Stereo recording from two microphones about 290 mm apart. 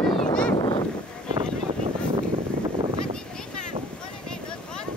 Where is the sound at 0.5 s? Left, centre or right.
Centre.